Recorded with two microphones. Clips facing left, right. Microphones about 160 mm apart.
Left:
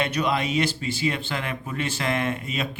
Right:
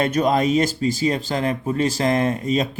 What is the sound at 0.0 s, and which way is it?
Speech, 45° right (ahead or behind).